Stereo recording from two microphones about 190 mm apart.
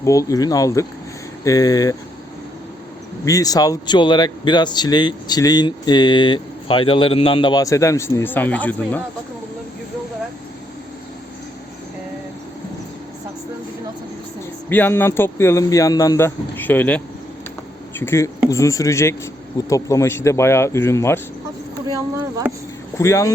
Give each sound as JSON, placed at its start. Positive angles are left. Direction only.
{"t": 0.0, "sound": "speech", "side_deg": 15}
{"t": 3.2, "sound": "speech", "side_deg": 20}
{"t": 14.7, "sound": "speech", "side_deg": 10}
{"t": 18.0, "sound": "speech", "side_deg": 15}
{"t": 21.8, "sound": "a sound", "side_deg": -20}
{"t": 23.0, "sound": "speech", "side_deg": 15}